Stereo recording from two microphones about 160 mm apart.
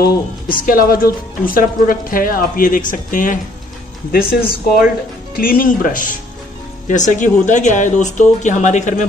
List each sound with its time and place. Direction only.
0.5 s a woman's voice: 65° left (ahead or behind)
4.1 s a woman's voice: 65° left (ahead or behind); by 9.0 s 50° left (ahead or behind)